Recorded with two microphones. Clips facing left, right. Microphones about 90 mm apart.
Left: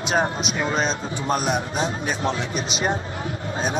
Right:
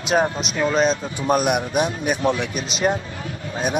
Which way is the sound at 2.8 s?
30° left (ahead or behind).